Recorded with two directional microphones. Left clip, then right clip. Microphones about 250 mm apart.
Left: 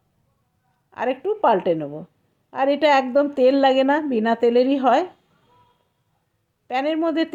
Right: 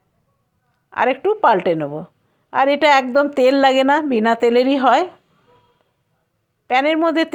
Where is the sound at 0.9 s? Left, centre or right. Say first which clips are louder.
Right 7 dB; centre.